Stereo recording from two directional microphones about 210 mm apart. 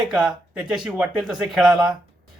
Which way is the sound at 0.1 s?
5° right (ahead or behind).